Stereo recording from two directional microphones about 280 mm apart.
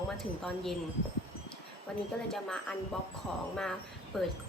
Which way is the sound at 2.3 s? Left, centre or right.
Centre.